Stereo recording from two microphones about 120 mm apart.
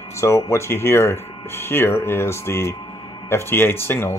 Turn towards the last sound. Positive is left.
turn(degrees=20)  # may be behind; listen again after turning